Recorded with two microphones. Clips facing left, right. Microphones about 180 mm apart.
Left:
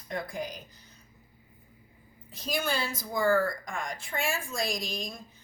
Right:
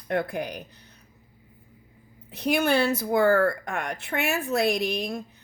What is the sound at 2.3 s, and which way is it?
A woman's voice, 65° right (ahead or behind).